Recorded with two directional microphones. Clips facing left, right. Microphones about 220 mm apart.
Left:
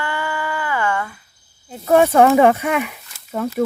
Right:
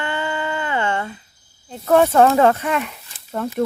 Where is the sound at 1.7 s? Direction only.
10° left (ahead or behind).